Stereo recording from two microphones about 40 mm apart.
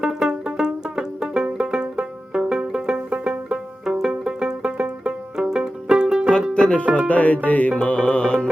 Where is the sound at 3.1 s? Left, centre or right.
Right.